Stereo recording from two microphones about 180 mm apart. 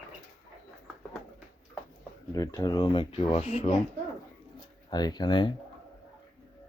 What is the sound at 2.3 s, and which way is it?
Speech, 20° left (ahead or behind).